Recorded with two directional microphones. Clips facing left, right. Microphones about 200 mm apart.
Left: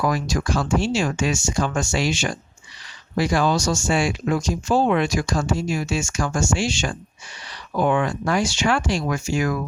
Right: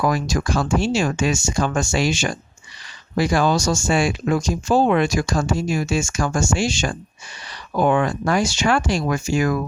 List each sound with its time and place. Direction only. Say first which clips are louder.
0.0 s speech: right 2 dB; 45° right (ahead or behind)